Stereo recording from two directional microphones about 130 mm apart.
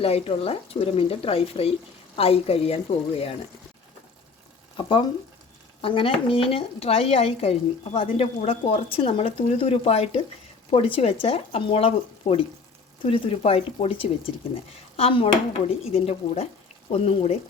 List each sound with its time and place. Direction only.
0.0 s speech: 50° left (ahead or behind)
4.8 s frying: 40° left (ahead or behind)
5.8 s speech: 45° left (ahead or behind)